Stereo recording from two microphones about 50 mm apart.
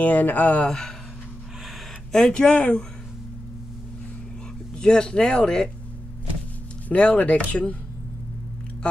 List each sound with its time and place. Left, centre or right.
0.0 s speech: left
0.7 s speech: centre
2.1 s speech: centre
4.7 s speech: centre
6.9 s speech: left